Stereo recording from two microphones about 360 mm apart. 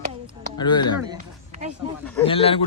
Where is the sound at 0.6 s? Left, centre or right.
Centre.